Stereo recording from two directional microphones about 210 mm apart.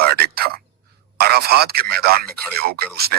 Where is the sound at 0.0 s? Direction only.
50° right (ahead or behind).